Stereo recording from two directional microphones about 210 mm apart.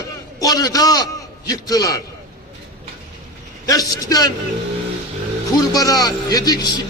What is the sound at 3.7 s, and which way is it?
Speech, 15° left (ahead or behind).